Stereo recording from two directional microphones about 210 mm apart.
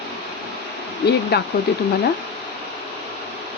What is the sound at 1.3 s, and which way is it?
Speech, 50° left (ahead or behind).